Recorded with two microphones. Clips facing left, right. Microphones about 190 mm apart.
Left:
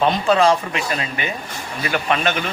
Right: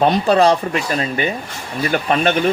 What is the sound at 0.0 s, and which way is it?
Speech, 40° right (ahead or behind).